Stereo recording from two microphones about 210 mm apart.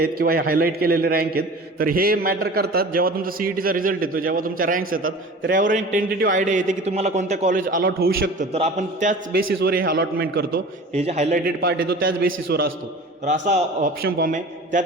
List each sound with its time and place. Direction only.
0.0 s a man's voice: 45° right (ahead or behind)
8.5 s a man's voice: 35° right (ahead or behind); by 10.6 s 50° right (ahead or behind)
10.9 s a man's voice: 30° right (ahead or behind)
13.2 s a man's voice: 35° right (ahead or behind)